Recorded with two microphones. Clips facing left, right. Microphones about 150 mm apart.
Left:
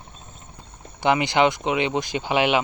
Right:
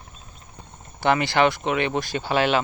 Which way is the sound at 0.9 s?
15° left (ahead or behind).